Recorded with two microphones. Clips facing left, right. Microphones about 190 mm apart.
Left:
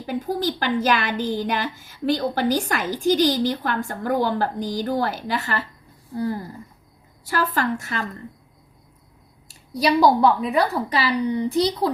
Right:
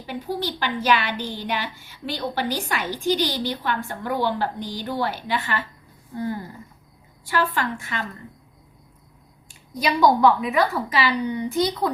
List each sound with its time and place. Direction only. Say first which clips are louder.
0.0 s a woman's voice: left 4 dB; 45° left (ahead or behind)
9.5 s a woman's voice: left 4 dB; 35° left (ahead or behind)